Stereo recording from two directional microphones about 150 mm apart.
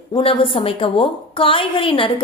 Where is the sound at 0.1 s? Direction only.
35° left (ahead or behind).